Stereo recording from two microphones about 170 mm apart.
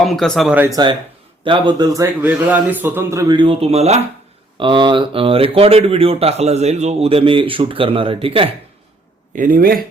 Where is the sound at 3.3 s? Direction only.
30° right (ahead or behind).